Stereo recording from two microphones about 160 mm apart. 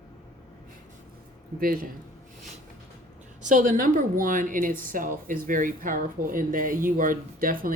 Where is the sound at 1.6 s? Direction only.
65° right (ahead or behind).